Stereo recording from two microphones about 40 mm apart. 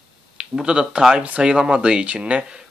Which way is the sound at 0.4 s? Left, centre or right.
Right.